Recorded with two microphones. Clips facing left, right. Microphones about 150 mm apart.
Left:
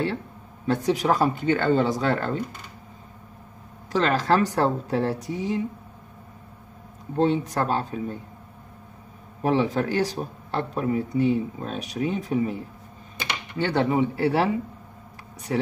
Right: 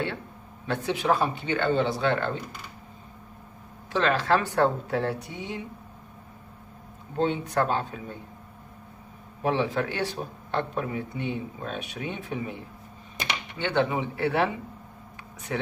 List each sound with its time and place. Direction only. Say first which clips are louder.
0.7 s speech: left 3 dB; 40° left (ahead or behind)
3.9 s speech: left 2 dB; 40° left (ahead or behind)
7.2 s speech: left 3 dB; 40° left (ahead or behind)
9.4 s speech: left 3 dB; 40° left (ahead or behind)
13.6 s speech: left 4 dB; 40° left (ahead or behind)
15.5 s speech: left 5 dB; 35° left (ahead or behind)